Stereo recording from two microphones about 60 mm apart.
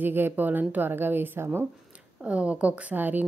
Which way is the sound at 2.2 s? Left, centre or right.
Right.